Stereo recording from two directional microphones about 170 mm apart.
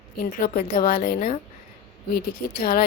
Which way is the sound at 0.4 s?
60° left (ahead or behind).